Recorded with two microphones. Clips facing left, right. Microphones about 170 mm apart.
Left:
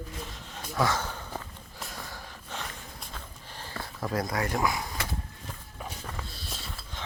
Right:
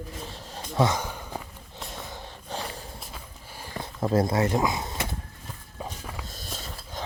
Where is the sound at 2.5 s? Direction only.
35° right (ahead or behind).